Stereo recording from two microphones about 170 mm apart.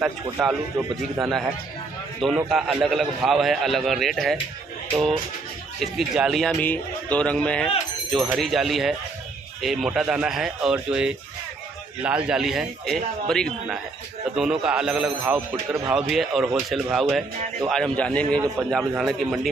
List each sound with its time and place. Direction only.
0.0 s a man's voice: 5° right (ahead or behind)
2.2 s a man's voice: centre (ahead or behind)
6.6 s a man's voice: 10° left (ahead or behind)
15.5 s speech: 20° right (ahead or behind)
15.9 s a man's voice: centre (ahead or behind)